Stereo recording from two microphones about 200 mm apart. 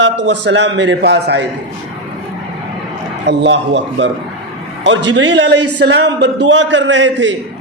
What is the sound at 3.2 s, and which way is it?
Speech, 60° right (ahead or behind).